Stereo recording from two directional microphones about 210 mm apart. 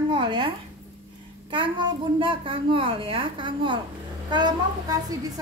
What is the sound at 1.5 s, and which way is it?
A child's voice, 25° right (ahead or behind).